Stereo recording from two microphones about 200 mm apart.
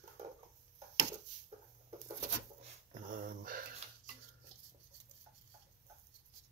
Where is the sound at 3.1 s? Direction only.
45° right (ahead or behind).